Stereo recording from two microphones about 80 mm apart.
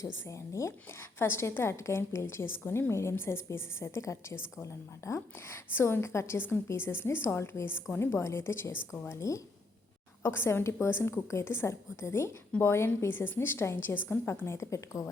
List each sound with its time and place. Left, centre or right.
0.0 s a woman's voice: left
10.2 s a woman's voice: left